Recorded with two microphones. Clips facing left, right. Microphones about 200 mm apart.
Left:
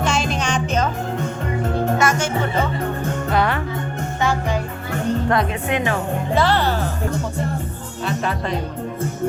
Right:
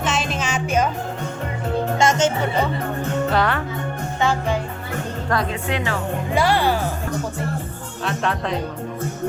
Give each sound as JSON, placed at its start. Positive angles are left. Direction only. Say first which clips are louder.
{"t": 0.0, "sound": "music", "louder": "left 2 dB", "side_deg": 0}
{"t": 2.0, "sound": "music", "louder": "right 1 dB", "side_deg": -25}
{"t": 3.3, "sound": "music", "louder": "left 2 dB", "side_deg": 10}
{"t": 5.3, "sound": "speech", "louder": "left 3 dB", "side_deg": 20}
{"t": 6.3, "sound": "speech", "louder": "even", "side_deg": -10}
{"t": 8.0, "sound": "speech", "louder": "even", "side_deg": 0}